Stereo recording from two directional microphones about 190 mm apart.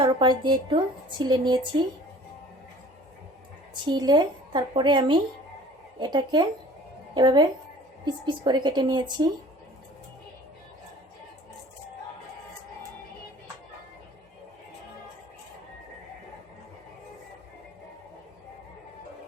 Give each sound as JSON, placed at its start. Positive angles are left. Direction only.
{"t": 0.0, "sound": "a woman's voice", "side_deg": -25}
{"t": 3.8, "sound": "a woman's voice", "side_deg": -20}